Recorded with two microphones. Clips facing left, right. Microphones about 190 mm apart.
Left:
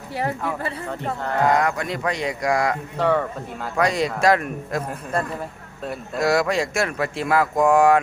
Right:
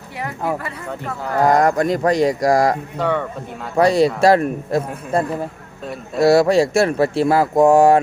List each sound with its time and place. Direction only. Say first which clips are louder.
1.4 s speech: right 6 dB; 40° right (ahead or behind)
3.0 s speech: left 3 dB; centre (ahead or behind)
3.8 s speech: right 7 dB; 30° right (ahead or behind)
6.1 s speech: right 8 dB; 30° right (ahead or behind)